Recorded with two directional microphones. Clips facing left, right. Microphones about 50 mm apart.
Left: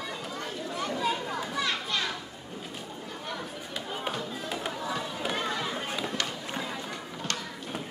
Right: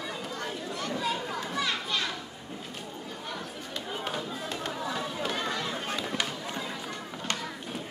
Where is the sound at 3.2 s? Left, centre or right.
Centre.